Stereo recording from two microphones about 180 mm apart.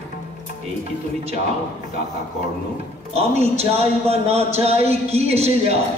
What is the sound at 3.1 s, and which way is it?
A man's voice, 35° right (ahead or behind).